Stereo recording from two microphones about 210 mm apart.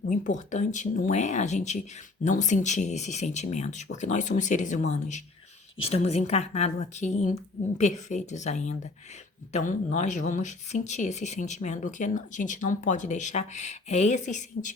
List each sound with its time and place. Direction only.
0.1 s speech: 35° left (ahead or behind)